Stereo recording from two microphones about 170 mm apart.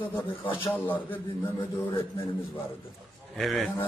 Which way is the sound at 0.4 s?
30° left (ahead or behind).